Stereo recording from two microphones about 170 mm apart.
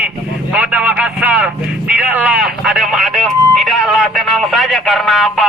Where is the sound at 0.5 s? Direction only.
10° right (ahead or behind).